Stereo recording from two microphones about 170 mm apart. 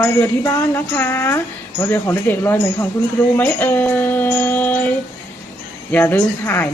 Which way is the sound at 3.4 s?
10° left (ahead or behind).